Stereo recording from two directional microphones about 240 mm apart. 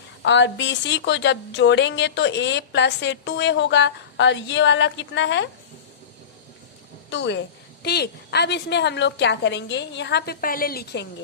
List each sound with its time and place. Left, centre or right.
0.2 s a woman's voice: left
7.1 s a woman's voice: left